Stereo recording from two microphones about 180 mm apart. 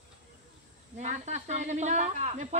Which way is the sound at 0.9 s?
40° right (ahead or behind).